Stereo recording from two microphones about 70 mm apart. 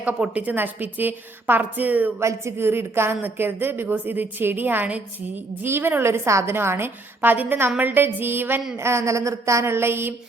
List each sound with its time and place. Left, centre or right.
0.1 s a woman's voice: centre
0.5 s a woman's voice: right
2.2 s a woman's voice: right
5.6 s a woman's voice: right